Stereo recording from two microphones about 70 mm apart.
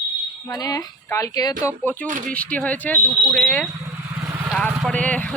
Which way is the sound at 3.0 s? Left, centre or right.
Right.